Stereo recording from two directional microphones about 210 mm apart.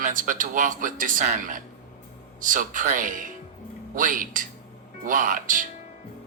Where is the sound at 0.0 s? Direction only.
40° right (ahead or behind).